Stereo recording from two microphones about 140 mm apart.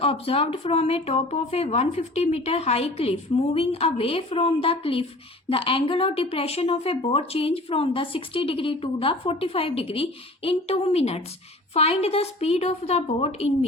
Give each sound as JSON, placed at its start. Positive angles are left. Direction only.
{"t": 0.0, "sound": "a woman's voice", "side_deg": 40}